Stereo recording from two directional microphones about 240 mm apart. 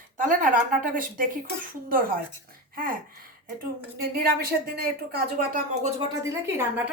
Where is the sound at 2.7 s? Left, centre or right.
Right.